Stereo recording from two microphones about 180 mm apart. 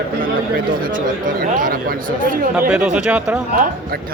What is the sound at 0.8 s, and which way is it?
Speech, 50° right (ahead or behind).